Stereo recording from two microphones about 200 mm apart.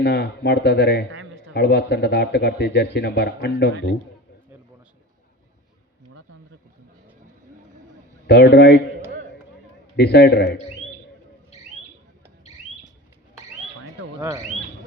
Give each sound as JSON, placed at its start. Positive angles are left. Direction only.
{"t": 0.0, "sound": "a man's voice", "side_deg": 55}
{"t": 8.3, "sound": "a man's voice", "side_deg": 55}
{"t": 9.9, "sound": "a man's voice", "side_deg": 55}
{"t": 14.2, "sound": "speech", "side_deg": -15}